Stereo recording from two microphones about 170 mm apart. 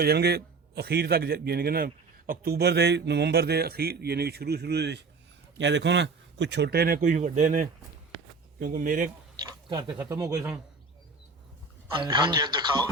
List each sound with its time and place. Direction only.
0.0 s a man's voice: 70° right (ahead or behind)
5.5 s speech: 90° right; by 7.7 s 50° right (ahead or behind)
8.5 s speech: 60° right (ahead or behind)
9.6 s speech: 25° right (ahead or behind)
12.0 s speech: 25° right (ahead or behind)